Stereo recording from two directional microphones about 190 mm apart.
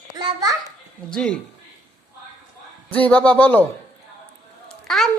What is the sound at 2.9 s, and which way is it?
Speech, 5° left (ahead or behind).